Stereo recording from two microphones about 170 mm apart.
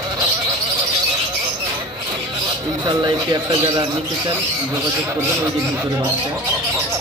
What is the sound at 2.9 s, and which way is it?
Speech, 25° right (ahead or behind).